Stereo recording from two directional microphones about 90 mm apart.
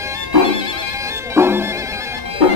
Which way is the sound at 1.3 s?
25° right (ahead or behind).